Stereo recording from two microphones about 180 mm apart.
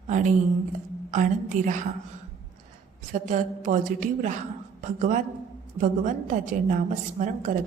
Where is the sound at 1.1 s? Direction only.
45° right (ahead or behind).